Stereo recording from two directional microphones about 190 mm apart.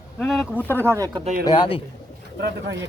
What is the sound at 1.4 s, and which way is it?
Speech, 25° left (ahead or behind).